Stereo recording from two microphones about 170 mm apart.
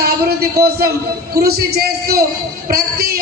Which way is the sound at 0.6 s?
70° right (ahead or behind).